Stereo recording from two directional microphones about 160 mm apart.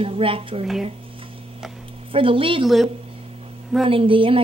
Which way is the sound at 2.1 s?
35° right (ahead or behind).